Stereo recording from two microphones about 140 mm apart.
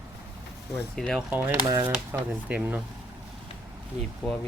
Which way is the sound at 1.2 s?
15° right (ahead or behind).